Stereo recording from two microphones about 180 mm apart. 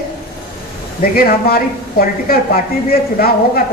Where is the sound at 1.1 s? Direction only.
55° left (ahead or behind).